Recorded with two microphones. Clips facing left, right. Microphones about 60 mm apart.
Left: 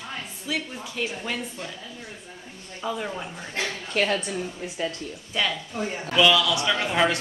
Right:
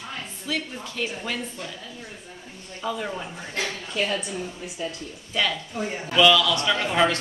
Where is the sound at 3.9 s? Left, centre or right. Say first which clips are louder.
Left 3 dB; left.